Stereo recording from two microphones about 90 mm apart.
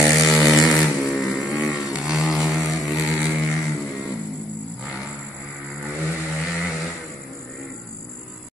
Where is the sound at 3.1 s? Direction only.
15° right (ahead or behind).